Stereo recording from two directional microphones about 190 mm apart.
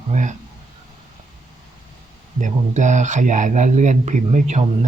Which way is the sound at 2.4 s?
40° right (ahead or behind).